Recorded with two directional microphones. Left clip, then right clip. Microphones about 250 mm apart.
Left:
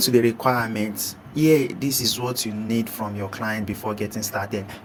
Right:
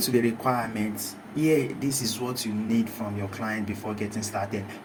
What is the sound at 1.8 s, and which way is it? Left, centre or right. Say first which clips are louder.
Speech: left 5 dB; left.